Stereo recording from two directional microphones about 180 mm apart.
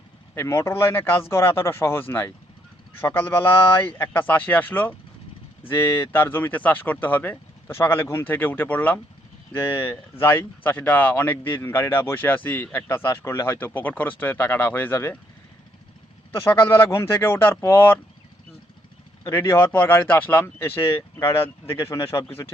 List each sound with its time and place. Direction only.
0.3 s speech: 15° left (ahead or behind)
16.3 s speech: 15° left (ahead or behind)
19.2 s speech: 15° left (ahead or behind)